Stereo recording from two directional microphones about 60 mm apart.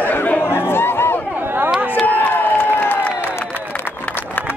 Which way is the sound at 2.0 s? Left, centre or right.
Left.